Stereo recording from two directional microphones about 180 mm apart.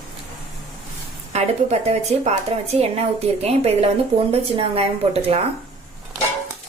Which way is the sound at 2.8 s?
35° right (ahead or behind).